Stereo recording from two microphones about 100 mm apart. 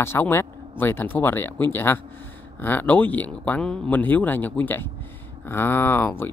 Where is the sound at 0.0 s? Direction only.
25° left (ahead or behind).